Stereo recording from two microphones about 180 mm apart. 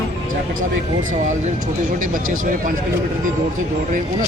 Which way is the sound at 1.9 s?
50° right (ahead or behind).